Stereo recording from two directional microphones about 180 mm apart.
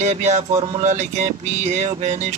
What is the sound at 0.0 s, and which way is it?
Speech, 40° right (ahead or behind).